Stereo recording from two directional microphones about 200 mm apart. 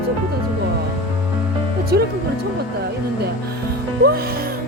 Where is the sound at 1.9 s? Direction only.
55° right (ahead or behind).